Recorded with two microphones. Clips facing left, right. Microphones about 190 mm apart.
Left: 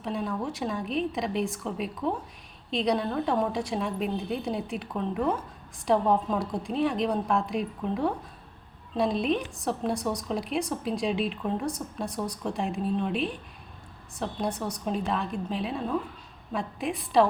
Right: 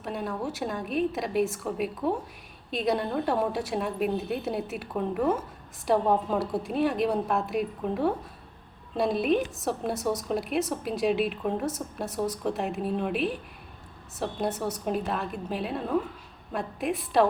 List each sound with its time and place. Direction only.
0.0 s a woman's voice: 5° right (ahead or behind)